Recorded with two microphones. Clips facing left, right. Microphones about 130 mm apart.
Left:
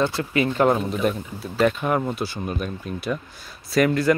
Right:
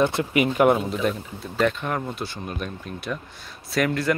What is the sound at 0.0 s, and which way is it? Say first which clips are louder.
Speech: right 1 dB; 20° right (ahead or behind).